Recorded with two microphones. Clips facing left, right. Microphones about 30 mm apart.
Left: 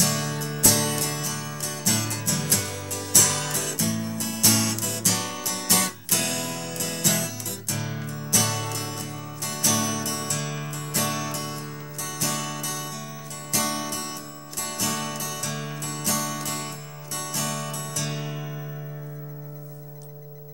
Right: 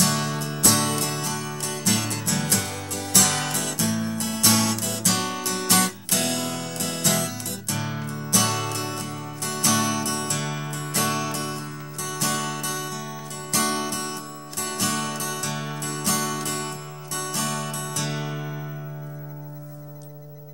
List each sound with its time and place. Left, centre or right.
0.0 s music: right
10.2 s music: right
15.7 s music: right